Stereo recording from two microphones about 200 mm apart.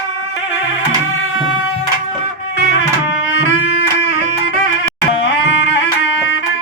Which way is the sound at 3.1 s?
65° left (ahead or behind).